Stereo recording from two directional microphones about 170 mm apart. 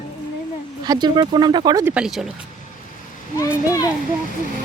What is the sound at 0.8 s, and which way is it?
Speech, 25° right (ahead or behind).